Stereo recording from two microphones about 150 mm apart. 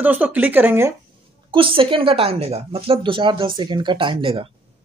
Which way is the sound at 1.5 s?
35° right (ahead or behind).